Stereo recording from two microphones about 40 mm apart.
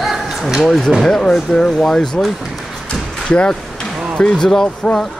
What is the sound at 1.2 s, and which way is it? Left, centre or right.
Speech, centre.